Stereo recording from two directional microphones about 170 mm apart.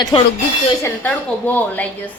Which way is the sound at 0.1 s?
25° left (ahead or behind).